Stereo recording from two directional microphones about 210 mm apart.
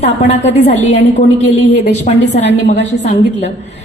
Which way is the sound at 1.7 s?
35° left (ahead or behind).